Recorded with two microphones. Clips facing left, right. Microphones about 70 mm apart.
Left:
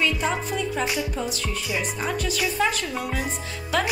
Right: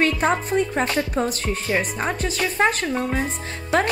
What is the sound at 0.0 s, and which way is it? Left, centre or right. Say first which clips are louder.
Music: right 4 dB; right.